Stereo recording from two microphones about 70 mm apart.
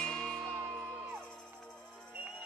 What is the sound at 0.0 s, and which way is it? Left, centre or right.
Music, centre.